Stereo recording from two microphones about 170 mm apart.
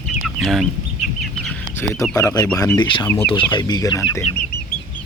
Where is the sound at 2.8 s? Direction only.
25° left (ahead or behind).